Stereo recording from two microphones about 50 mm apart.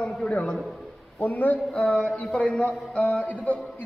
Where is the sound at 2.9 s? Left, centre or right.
Left.